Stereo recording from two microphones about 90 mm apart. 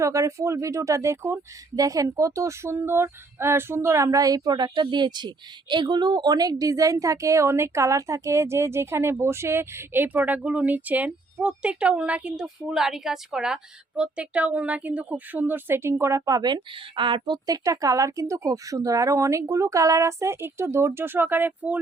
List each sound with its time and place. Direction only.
0.0 s speech: 35° right (ahead or behind)
1.7 s speech: 40° right (ahead or behind); by 21.8 s 20° right (ahead or behind)